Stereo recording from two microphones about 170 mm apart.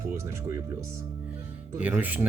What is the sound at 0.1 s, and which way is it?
Speech, 15° right (ahead or behind).